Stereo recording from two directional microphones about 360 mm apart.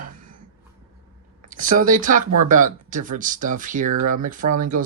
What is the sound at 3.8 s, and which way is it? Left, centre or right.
Speech, right.